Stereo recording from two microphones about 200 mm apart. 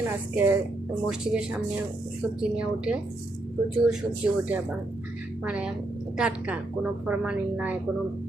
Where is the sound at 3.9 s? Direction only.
5° right (ahead or behind).